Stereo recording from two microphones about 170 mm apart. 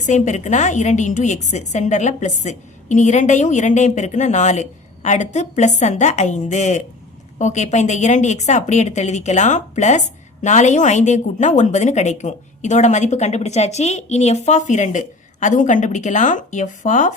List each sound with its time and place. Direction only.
0.0 s a woman's voice: 45° left (ahead or behind)